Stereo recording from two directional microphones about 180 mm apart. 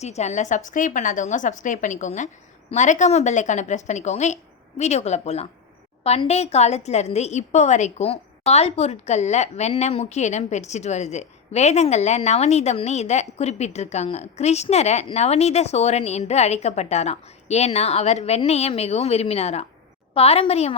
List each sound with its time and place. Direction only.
0.0 s a woman's voice: 40° left (ahead or behind)